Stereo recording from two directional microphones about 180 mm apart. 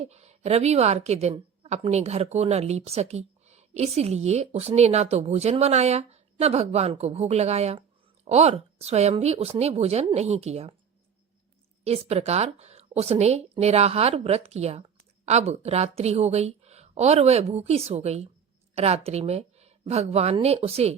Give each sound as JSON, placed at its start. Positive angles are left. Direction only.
{"t": 0.0, "sound": "a woman's voice", "side_deg": -35}
{"t": 11.9, "sound": "a woman's voice", "side_deg": -35}